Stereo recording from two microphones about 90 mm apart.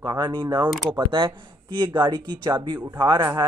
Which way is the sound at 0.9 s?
70° right (ahead or behind).